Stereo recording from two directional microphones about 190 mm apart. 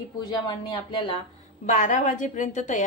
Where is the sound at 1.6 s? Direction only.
40° left (ahead or behind).